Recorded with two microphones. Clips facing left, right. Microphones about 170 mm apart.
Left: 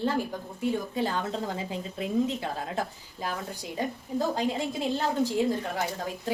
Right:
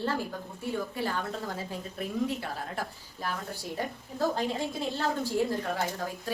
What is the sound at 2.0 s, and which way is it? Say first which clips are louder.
A woman's voice: left 4 dB; 20° left (ahead or behind).